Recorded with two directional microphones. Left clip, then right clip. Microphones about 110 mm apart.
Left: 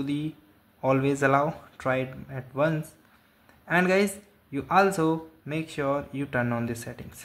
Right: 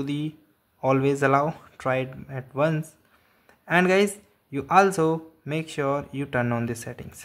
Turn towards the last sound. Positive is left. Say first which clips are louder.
# right 2 dB
turn(degrees=-25)  # may be behind; listen again after turning